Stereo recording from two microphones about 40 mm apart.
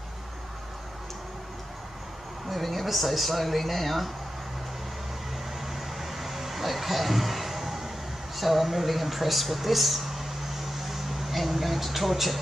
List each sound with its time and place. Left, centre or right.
2.5 s speech: centre
5.7 s a sound: centre
8.4 s speech: centre